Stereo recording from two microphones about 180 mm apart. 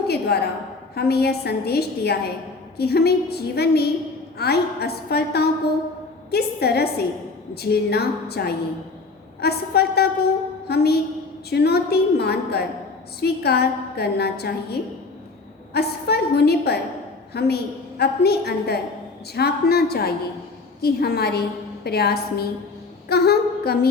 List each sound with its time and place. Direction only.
0.1 s a woman's voice: 65° left (ahead or behind)